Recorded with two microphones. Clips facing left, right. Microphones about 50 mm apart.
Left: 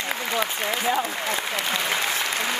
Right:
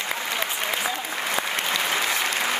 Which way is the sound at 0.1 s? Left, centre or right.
Centre.